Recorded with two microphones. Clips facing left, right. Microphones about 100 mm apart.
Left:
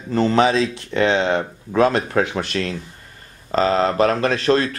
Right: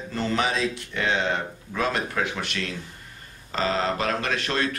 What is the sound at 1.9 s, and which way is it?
Speech, 40° left (ahead or behind).